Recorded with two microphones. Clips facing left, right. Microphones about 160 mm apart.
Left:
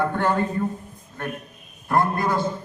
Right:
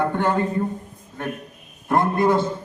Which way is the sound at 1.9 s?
20° right (ahead or behind).